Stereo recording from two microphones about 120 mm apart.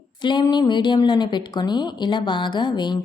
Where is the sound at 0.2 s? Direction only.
40° left (ahead or behind).